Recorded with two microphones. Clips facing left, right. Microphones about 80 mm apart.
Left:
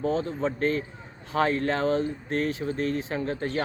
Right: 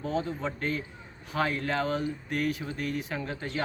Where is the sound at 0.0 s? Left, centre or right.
Left.